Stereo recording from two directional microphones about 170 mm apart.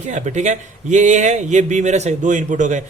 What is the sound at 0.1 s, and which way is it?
A man's voice, 45° right (ahead or behind).